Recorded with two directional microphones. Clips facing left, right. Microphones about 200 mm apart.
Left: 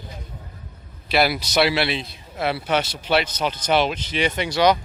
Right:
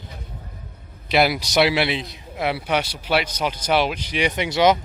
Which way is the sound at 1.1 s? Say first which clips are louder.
Right 1 dB; 15° right (ahead or behind).